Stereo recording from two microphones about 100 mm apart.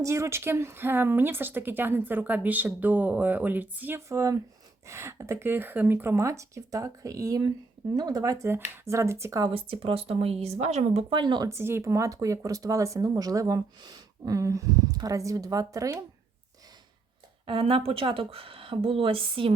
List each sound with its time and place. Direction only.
0.0 s speech: 30° right (ahead or behind)
4.1 s speech: 35° right (ahead or behind)
8.4 s speech: 25° right (ahead or behind)
9.5 s speech: 65° right (ahead or behind); by 11.0 s 90° right
11.1 s speech: 50° right (ahead or behind)
11.4 s speech: 25° right (ahead or behind)
17.4 s speech: 65° right (ahead or behind)